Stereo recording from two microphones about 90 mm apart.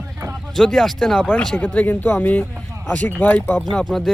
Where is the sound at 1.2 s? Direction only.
15° left (ahead or behind).